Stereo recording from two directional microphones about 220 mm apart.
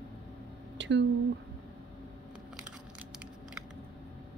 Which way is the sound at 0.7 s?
55° right (ahead or behind).